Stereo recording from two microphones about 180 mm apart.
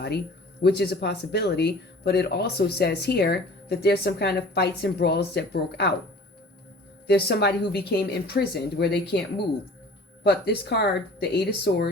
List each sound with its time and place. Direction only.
0.6 s speech: 65° left (ahead or behind)
7.1 s speech: 65° left (ahead or behind)
10.2 s speech: 65° left (ahead or behind)